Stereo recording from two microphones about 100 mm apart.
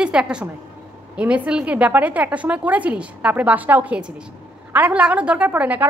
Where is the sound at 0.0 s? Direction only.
10° right (ahead or behind).